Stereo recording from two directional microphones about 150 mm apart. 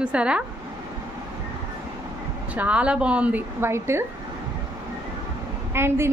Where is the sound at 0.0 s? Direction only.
5° right (ahead or behind).